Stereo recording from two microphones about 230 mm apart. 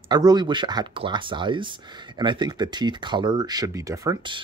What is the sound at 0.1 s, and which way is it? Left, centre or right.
Speech, centre.